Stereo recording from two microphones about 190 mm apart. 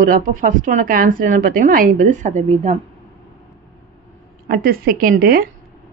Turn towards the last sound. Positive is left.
turn(degrees=-50)  # may be behind; listen again after turning